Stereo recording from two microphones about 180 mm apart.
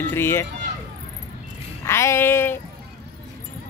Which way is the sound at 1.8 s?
15° left (ahead or behind).